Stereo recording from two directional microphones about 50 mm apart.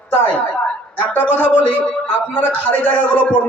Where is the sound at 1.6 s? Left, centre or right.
Left.